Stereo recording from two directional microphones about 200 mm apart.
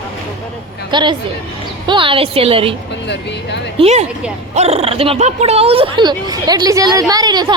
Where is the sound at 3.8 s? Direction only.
35° right (ahead or behind).